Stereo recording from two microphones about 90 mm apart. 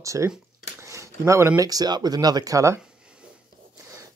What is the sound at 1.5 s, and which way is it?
Speech, 40° right (ahead or behind).